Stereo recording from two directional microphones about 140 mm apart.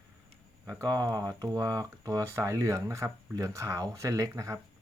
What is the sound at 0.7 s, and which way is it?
Speech, 25° right (ahead or behind).